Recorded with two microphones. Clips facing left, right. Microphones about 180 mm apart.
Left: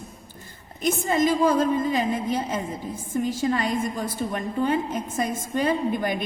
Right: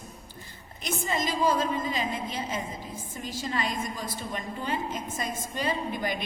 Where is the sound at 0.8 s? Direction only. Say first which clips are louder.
Left 9 dB; 50° left (ahead or behind).